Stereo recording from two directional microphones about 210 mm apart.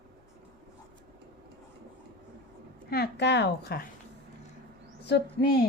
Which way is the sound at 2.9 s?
50° left (ahead or behind).